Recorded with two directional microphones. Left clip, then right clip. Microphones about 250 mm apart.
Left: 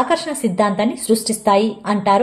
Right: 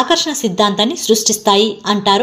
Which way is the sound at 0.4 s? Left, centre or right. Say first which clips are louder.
Right 3 dB; centre.